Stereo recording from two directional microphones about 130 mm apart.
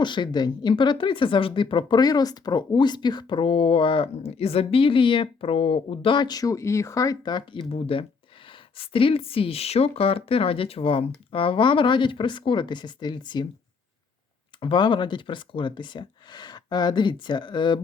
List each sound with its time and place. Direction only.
0.0 s a woman's voice: 35° left (ahead or behind)
7.7 s a woman's voice: 45° left (ahead or behind)
14.6 s a woman's voice: 40° left (ahead or behind)